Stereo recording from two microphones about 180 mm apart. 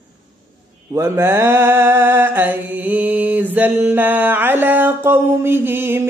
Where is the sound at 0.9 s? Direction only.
15° right (ahead or behind).